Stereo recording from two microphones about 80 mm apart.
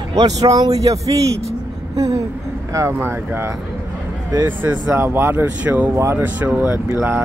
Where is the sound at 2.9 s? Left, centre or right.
Right.